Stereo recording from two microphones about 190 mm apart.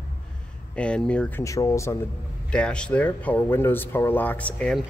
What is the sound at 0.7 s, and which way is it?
Speech, 5° left (ahead or behind).